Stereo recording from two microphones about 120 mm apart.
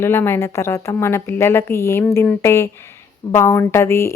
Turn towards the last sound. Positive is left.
turn(degrees=20)  # may be behind; listen again after turning